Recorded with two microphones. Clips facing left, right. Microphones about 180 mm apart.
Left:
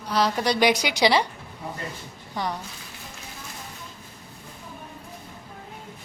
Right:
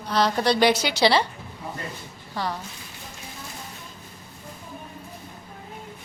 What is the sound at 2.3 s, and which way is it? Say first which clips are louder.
Speech: even; 20° left (ahead or behind).